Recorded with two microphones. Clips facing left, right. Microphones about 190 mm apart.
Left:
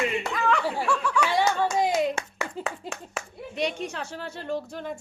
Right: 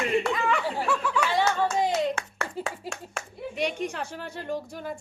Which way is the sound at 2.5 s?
Centre (ahead or behind).